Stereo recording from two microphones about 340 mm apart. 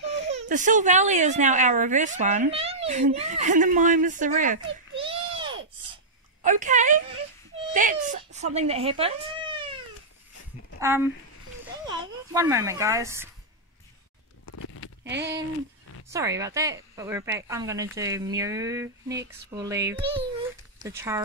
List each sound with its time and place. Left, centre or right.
0.0 s a woman's voice: right
7.7 s baby cry: right
8.5 s speech: centre
10.8 s speech: centre
14.4 s a sound: left
15.0 s speech: right
16.1 s speech: centre